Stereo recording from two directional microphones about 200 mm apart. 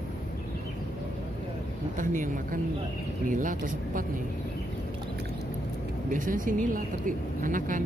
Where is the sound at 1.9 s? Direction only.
40° right (ahead or behind).